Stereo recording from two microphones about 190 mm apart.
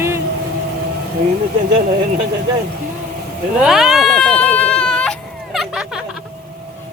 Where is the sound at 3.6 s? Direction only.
Centre (ahead or behind).